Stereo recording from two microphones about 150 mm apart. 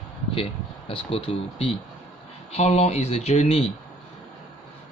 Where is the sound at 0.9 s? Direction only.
35° left (ahead or behind).